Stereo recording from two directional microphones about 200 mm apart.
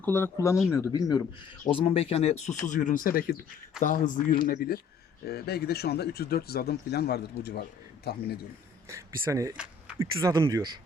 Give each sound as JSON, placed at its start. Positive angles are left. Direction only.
{"t": 0.0, "sound": "speech", "side_deg": 10}
{"t": 1.8, "sound": "speech", "side_deg": 30}
{"t": 8.9, "sound": "speech", "side_deg": -15}